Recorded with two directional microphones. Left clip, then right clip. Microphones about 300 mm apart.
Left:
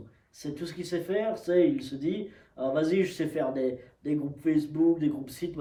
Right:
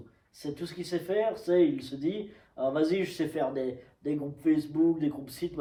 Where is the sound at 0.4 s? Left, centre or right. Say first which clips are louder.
Even; centre.